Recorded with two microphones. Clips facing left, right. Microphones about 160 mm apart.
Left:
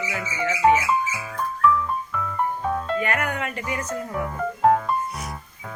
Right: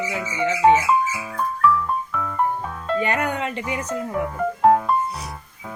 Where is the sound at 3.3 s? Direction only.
25° right (ahead or behind).